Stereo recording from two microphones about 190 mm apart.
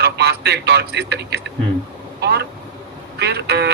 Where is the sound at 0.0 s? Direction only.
60° right (ahead or behind).